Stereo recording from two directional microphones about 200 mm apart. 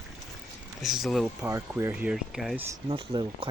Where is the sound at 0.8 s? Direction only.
Centre (ahead or behind).